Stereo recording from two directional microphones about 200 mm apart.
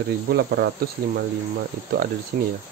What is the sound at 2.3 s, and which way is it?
Speech, 40° right (ahead or behind).